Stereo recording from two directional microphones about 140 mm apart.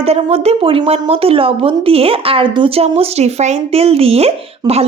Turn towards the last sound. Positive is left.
turn(degrees=-45)  # may be behind; listen again after turning